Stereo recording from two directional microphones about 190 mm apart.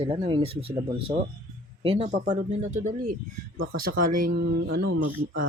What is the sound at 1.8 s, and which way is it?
Speech, 30° right (ahead or behind).